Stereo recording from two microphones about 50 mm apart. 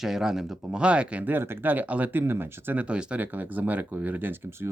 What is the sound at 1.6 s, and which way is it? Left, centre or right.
Speech, right.